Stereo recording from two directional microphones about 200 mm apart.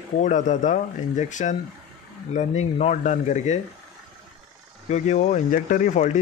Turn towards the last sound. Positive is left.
turn(degrees=40)  # may be behind; listen again after turning